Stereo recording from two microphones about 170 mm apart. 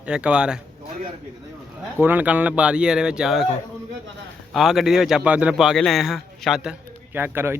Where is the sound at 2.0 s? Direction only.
10° right (ahead or behind).